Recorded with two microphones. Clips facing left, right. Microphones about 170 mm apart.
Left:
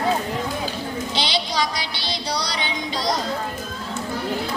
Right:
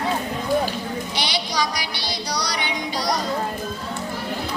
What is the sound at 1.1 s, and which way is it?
Music, 25° left (ahead or behind).